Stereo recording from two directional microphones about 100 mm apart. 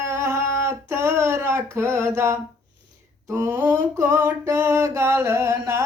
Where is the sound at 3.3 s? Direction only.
25° right (ahead or behind).